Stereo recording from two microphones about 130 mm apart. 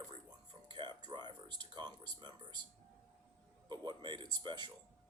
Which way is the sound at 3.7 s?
35° right (ahead or behind).